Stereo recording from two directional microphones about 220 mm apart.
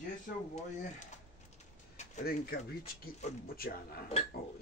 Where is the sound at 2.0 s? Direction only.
45° left (ahead or behind).